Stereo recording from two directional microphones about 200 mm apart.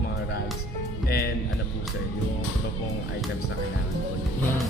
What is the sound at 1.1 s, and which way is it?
Speech, 50° left (ahead or behind).